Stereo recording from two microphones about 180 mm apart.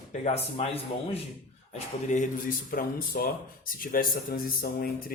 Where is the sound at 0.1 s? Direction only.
40° left (ahead or behind).